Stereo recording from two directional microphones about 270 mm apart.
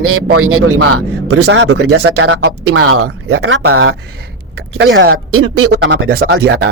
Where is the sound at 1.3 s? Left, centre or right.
Right.